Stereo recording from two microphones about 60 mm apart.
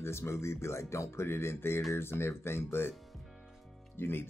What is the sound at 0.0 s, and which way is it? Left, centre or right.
Speech, left.